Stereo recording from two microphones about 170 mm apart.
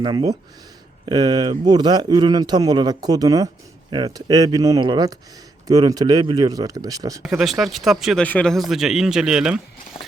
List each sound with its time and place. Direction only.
0.0 s speech: 25° right (ahead or behind)
7.3 s speech: 5° right (ahead or behind)